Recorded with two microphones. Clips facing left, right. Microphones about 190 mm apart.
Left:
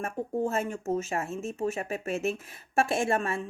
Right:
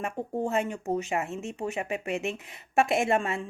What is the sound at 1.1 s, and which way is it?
Speech, 20° right (ahead or behind).